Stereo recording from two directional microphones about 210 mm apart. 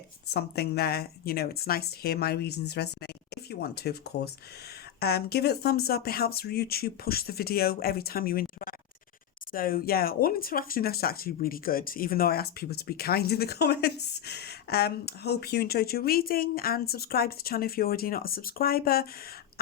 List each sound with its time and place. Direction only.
0.3 s speech: 50° left (ahead or behind)